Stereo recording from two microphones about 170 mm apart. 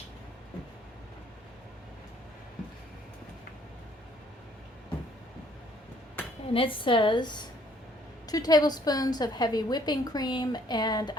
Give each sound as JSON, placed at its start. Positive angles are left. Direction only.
{"t": 6.5, "sound": "a woman's voice", "side_deg": 30}